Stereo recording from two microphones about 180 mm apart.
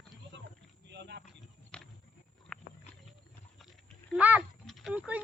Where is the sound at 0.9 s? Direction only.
70° right (ahead or behind).